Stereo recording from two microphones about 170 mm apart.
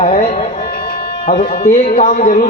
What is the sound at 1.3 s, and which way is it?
A man's voice, 50° left (ahead or behind).